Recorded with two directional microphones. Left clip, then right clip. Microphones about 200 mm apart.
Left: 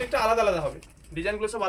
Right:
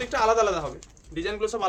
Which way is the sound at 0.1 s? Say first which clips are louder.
Right 2 dB; 35° right (ahead or behind).